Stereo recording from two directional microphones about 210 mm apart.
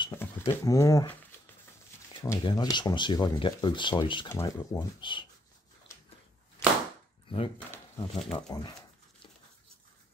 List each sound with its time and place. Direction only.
0.0 s speech: 15° left (ahead or behind)
2.4 s speech: 20° left (ahead or behind)
7.2 s speech: 25° left (ahead or behind)
7.5 s speech: 10° left (ahead or behind)
8.3 s speech: 20° left (ahead or behind)